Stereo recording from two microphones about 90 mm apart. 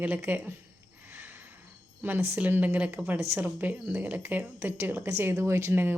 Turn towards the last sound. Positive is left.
turn(degrees=-25)  # may be behind; listen again after turning